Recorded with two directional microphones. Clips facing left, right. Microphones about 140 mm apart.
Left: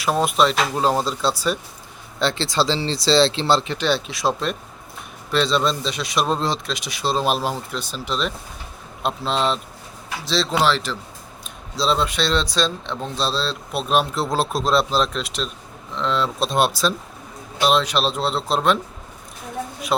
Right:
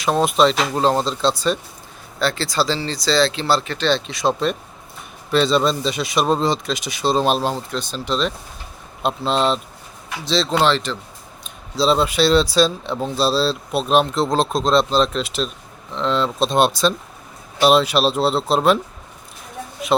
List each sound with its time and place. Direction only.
0.0 s speech: 5° left (ahead or behind)
2.1 s speech: 20° left (ahead or behind); by 18.8 s 5° right (ahead or behind)
19.9 s speech: centre (ahead or behind)